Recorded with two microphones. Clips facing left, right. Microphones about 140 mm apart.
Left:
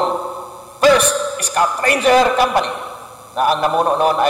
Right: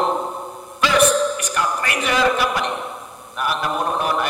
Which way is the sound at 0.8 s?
45° left (ahead or behind).